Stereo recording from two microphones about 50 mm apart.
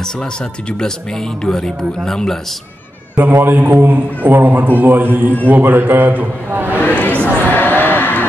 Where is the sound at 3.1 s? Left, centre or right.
Right.